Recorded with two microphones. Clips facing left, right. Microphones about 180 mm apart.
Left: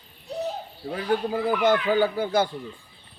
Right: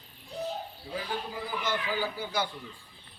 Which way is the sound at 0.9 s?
65° left (ahead or behind).